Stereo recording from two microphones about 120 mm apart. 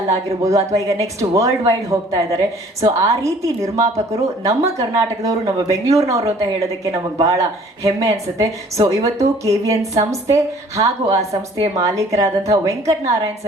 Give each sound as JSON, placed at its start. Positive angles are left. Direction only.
{"t": 0.1, "sound": "speech", "side_deg": -25}